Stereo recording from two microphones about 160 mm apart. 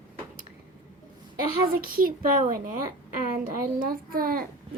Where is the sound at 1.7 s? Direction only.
65° right (ahead or behind).